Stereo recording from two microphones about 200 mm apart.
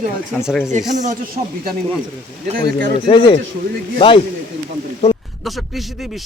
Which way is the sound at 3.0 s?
25° left (ahead or behind).